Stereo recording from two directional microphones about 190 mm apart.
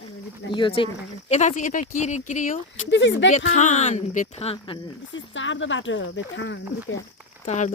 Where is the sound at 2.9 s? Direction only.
70° left (ahead or behind).